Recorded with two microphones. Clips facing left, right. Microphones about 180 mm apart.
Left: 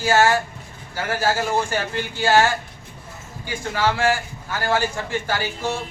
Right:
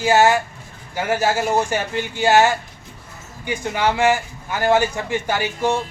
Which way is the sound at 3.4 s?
20° right (ahead or behind).